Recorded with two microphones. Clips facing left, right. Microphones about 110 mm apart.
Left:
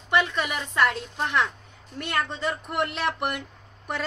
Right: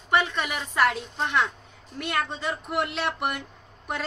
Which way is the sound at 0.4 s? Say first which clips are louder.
Even; 5° right (ahead or behind).